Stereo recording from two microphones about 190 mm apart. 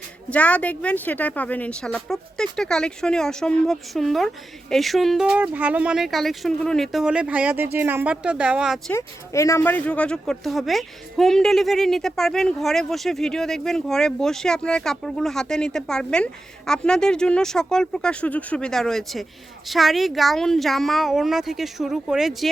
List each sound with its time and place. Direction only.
0.3 s speech: 5° left (ahead or behind)
8.9 s speech: 15° left (ahead or behind); by 22.4 s centre (ahead or behind)